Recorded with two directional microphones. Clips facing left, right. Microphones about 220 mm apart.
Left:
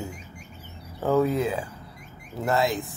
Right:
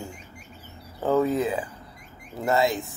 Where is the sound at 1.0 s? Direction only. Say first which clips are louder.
Even; centre (ahead or behind).